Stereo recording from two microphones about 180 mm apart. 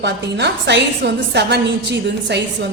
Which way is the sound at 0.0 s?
70° right (ahead or behind).